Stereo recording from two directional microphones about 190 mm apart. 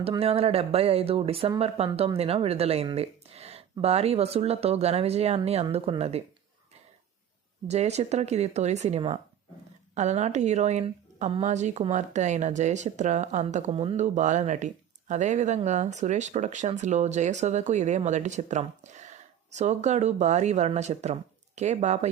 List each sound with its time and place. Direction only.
0.0 s speech: 30° right (ahead or behind)
7.7 s speech: 35° right (ahead or behind)